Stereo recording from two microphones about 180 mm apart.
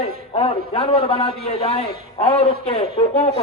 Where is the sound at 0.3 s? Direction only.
30° left (ahead or behind).